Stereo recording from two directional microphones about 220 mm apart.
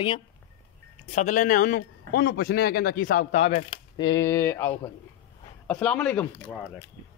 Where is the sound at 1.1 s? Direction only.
35° left (ahead or behind); by 6.5 s 5° left (ahead or behind).